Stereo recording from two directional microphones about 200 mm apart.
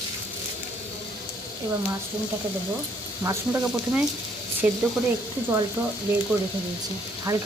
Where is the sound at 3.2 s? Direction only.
10° right (ahead or behind).